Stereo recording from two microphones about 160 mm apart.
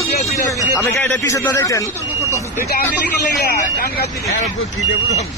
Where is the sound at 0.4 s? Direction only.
20° left (ahead or behind).